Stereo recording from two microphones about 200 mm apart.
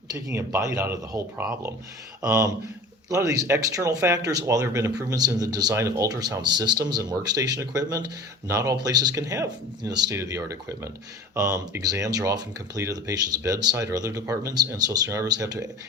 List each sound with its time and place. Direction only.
0.1 s speech: 15° right (ahead or behind)